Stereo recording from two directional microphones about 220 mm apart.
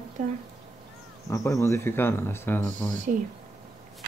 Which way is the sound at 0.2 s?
35° right (ahead or behind).